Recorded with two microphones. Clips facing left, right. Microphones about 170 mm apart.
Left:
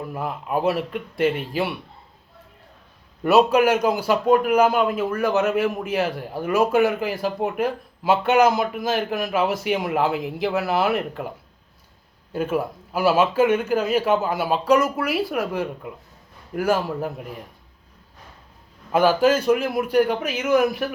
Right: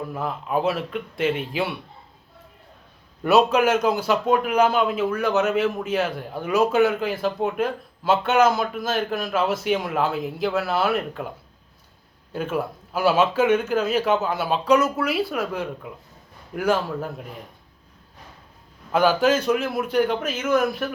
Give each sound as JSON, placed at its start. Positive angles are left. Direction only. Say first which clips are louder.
{"t": 0.1, "sound": "a man's voice", "louder": "left 1 dB", "side_deg": 5}
{"t": 3.3, "sound": "a man's voice", "louder": "left 1 dB", "side_deg": 10}
{"t": 12.3, "sound": "a man's voice", "louder": "left 2 dB", "side_deg": 10}
{"t": 18.9, "sound": "a man's voice", "louder": "left 1 dB", "side_deg": 5}